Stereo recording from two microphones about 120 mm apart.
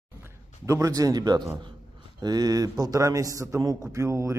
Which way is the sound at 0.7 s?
25° right (ahead or behind).